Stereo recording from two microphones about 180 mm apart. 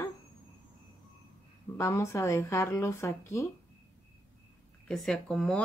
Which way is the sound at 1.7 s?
15° left (ahead or behind).